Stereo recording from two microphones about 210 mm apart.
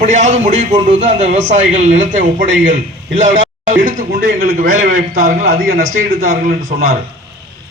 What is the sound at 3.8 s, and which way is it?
A man's voice, 40° right (ahead or behind).